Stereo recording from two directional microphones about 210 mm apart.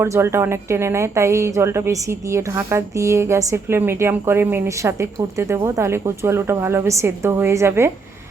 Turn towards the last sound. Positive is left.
turn(degrees=-10)  # may be behind; listen again after turning